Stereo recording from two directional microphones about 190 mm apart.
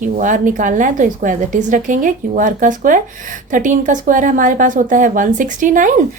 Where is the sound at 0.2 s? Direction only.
45° right (ahead or behind).